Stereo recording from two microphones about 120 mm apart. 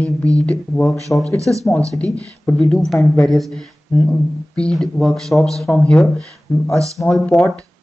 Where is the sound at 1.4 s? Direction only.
25° right (ahead or behind).